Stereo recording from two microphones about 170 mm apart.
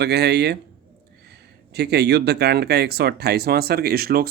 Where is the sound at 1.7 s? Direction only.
75° right (ahead or behind).